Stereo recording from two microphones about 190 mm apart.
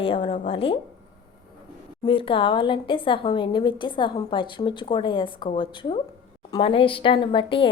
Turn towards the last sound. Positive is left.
turn(degrees=25)  # may be behind; listen again after turning